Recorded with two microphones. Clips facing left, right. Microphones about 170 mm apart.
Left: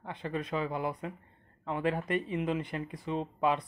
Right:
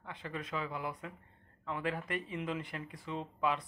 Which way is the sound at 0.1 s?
25° left (ahead or behind).